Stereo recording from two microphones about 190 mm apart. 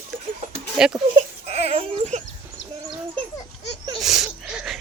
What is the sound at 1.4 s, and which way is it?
Speech, 35° right (ahead or behind).